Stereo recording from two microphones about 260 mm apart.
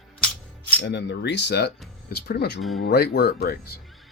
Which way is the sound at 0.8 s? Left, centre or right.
Left.